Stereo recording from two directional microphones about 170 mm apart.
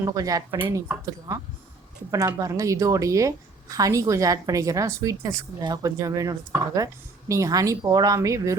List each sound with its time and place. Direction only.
0.0 s a woman's voice: 20° right (ahead or behind)